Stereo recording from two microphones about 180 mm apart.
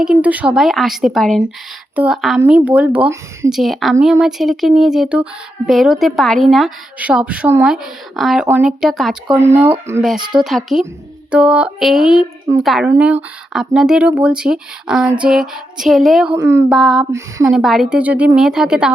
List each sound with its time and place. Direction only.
0.0 s speech: 5° right (ahead or behind)
3.5 s speech: centre (ahead or behind)
9.3 s speech: 10° right (ahead or behind)
10.4 s speech: centre (ahead or behind)
16.4 s speech: 15° right (ahead or behind)
16.7 s speech: centre (ahead or behind)
17.1 s speech: 15° right (ahead or behind)
17.4 s speech: centre (ahead or behind)